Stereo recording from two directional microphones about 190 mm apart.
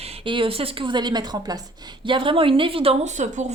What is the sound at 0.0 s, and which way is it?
A woman's voice, 30° right (ahead or behind).